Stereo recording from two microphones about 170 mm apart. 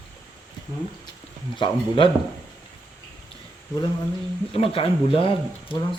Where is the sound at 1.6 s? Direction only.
30° left (ahead or behind).